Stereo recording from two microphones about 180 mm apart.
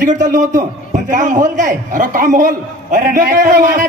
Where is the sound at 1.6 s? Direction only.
45° right (ahead or behind).